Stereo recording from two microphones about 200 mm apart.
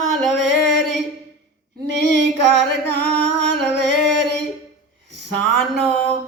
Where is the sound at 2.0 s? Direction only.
60° right (ahead or behind).